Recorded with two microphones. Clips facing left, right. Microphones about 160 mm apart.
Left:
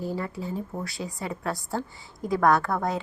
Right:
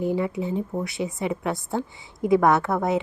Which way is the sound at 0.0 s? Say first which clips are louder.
Right 7 dB; 20° right (ahead or behind).